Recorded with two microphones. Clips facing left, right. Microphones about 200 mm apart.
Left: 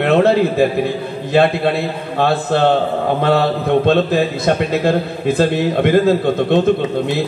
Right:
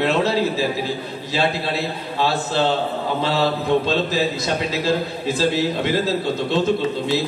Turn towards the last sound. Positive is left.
turn(degrees=55)  # may be behind; listen again after turning